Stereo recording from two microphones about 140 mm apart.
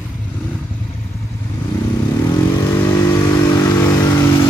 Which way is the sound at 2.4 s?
25° left (ahead or behind).